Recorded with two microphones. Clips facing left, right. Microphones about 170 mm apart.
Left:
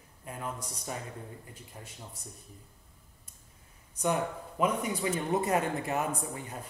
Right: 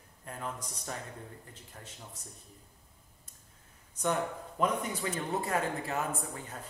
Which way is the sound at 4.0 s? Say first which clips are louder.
Left 2 dB; 10° left (ahead or behind).